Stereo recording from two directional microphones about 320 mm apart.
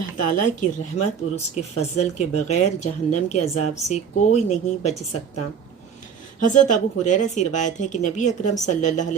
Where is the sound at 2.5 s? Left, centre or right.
Left.